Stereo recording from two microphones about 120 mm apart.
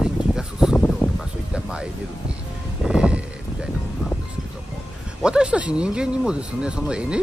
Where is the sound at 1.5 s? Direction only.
10° right (ahead or behind).